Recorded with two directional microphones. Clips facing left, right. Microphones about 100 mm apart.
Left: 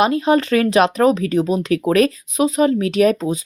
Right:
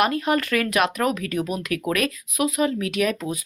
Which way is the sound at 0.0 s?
25° left (ahead or behind).